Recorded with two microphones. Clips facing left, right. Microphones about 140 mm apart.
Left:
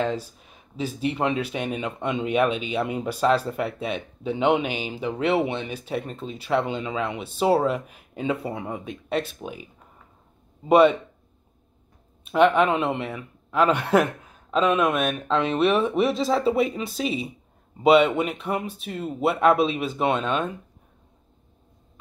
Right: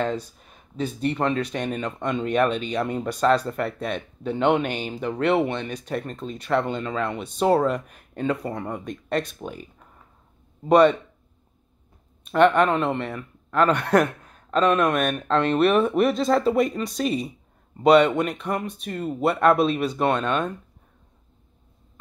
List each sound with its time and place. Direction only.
0.0 s speech: 5° left (ahead or behind)
12.3 s speech: 5° left (ahead or behind)